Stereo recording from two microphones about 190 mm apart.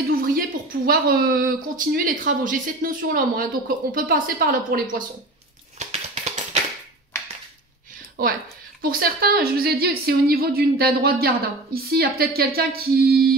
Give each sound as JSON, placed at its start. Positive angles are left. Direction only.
{"t": 0.1, "sound": "a sound", "side_deg": -50}
{"t": 0.8, "sound": "a woman's voice", "side_deg": -50}
{"t": 5.8, "sound": "music", "side_deg": -35}
{"t": 8.2, "sound": "a woman's voice", "side_deg": -50}